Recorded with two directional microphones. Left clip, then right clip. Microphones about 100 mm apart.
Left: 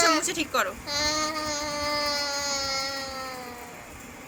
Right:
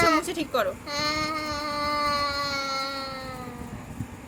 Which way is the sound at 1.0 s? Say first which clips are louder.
Even; 35° right (ahead or behind).